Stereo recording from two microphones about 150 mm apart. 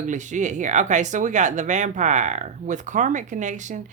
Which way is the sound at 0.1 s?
55° right (ahead or behind).